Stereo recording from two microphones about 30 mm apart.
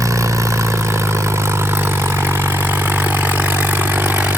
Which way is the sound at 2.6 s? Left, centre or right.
Right.